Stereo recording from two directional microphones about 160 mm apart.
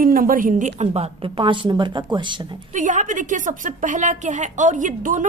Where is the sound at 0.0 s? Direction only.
60° right (ahead or behind); by 2.4 s 30° right (ahead or behind).